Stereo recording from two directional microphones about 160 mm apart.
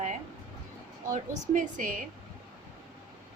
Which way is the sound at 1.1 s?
55° right (ahead or behind).